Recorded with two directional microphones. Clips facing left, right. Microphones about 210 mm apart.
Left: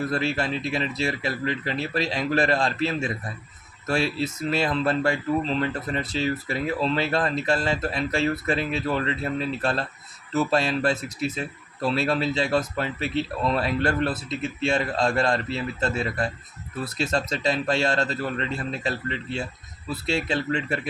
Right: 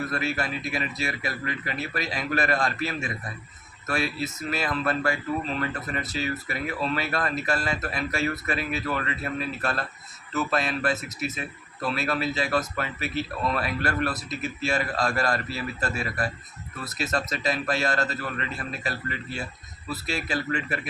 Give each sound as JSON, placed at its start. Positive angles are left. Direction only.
{"t": 0.1, "sound": "speech", "side_deg": 30}